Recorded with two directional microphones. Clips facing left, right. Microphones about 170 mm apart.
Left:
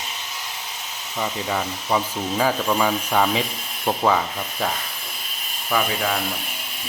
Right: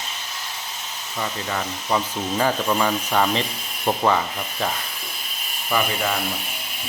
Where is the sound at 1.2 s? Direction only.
5° left (ahead or behind).